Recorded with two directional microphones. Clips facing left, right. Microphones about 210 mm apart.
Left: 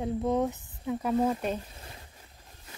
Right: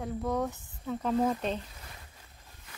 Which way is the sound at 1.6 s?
30° left (ahead or behind).